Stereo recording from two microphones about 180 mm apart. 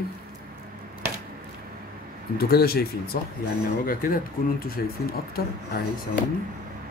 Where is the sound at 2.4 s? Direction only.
55° left (ahead or behind).